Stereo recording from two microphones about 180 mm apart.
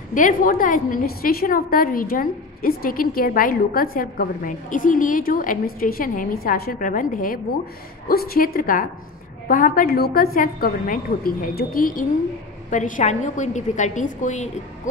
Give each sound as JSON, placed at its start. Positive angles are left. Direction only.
{"t": 0.1, "sound": "a woman's voice", "side_deg": 50}